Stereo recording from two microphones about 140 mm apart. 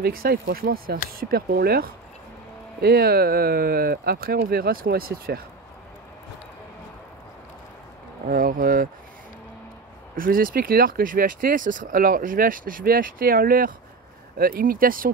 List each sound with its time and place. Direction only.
0.0 s speech: 90° right
2.9 s speech: 90° right
8.3 s speech: 90° right
10.1 s speech: 90° right